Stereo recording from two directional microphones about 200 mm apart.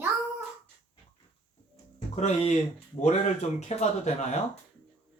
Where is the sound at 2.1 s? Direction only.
35° left (ahead or behind).